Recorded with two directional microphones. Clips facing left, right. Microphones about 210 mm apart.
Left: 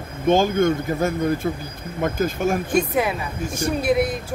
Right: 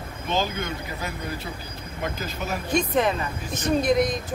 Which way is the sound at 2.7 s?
10° left (ahead or behind).